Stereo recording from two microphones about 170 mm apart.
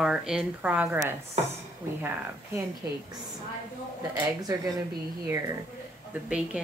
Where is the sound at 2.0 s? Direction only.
10° right (ahead or behind).